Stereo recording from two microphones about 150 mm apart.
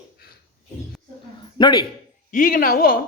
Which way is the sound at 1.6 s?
30° left (ahead or behind).